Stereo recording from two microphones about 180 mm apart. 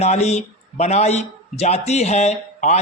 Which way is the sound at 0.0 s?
35° left (ahead or behind).